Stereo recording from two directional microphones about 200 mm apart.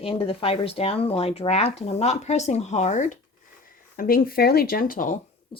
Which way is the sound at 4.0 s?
45° left (ahead or behind).